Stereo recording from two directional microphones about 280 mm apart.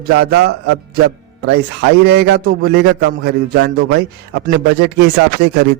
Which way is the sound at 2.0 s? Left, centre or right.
Right.